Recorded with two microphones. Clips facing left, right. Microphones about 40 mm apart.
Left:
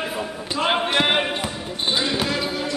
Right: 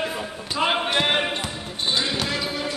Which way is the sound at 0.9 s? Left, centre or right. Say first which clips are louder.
Left 2 dB; centre.